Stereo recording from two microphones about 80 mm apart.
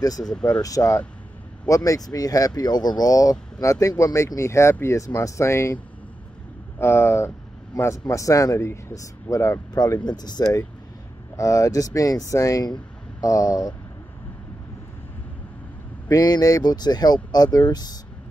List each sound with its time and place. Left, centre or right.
0.2 s speech: centre
0.6 s speech: left
6.8 s speech: left
8.1 s speech: left
10.0 s speech: left
11.3 s speech: left
16.1 s speech: left